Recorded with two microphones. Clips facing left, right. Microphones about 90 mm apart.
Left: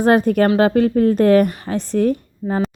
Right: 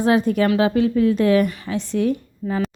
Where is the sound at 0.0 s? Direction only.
50° left (ahead or behind).